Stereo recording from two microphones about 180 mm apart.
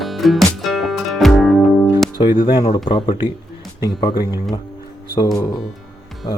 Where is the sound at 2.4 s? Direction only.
25° left (ahead or behind).